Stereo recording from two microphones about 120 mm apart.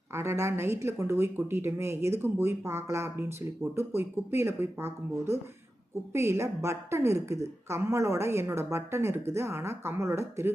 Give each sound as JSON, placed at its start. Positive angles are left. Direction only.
{"t": 0.1, "sound": "speech", "side_deg": -20}